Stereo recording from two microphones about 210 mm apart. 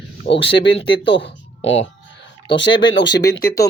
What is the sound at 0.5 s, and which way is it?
Speech, 55° left (ahead or behind).